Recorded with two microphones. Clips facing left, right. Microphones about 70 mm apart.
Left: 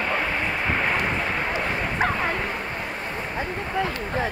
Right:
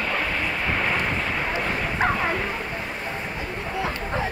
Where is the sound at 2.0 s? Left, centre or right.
Centre.